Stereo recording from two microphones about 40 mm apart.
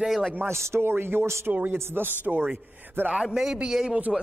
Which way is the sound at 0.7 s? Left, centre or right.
Right.